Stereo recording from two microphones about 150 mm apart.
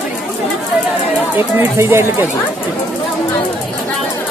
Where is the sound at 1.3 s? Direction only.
15° right (ahead or behind).